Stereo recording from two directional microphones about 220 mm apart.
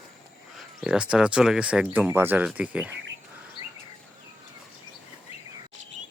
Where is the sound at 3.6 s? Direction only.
20° right (ahead or behind).